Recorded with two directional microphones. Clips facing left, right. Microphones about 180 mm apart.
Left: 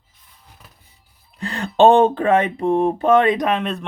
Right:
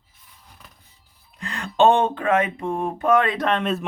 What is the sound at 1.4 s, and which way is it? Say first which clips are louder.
Speech: left 4 dB; 30° left (ahead or behind).